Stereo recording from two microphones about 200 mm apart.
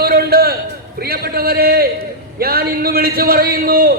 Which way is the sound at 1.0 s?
50° right (ahead or behind).